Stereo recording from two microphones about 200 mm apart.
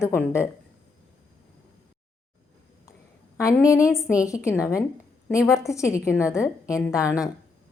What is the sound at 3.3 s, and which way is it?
Speech, 15° left (ahead or behind).